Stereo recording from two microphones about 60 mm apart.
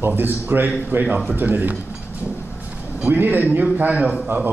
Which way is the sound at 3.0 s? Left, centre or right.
Right.